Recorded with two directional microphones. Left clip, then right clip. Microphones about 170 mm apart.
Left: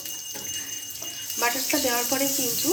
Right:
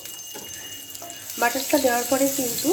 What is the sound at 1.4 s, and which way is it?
Speech, 45° right (ahead or behind).